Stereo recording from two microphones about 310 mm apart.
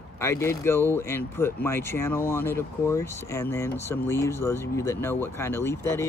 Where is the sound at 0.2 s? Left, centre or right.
Centre.